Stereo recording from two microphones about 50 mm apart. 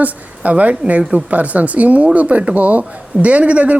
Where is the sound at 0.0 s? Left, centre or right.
Right.